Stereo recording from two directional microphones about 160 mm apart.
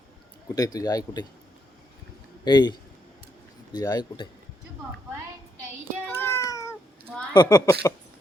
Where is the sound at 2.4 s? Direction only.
25° left (ahead or behind).